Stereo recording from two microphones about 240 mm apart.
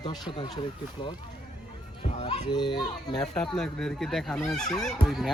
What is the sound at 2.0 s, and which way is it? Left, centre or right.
Speech, left.